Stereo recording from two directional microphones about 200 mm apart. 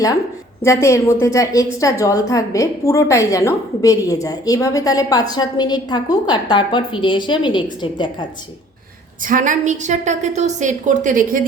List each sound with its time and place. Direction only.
0.6 s a woman's voice: 15° left (ahead or behind)
9.2 s a woman's voice: 40° right (ahead or behind)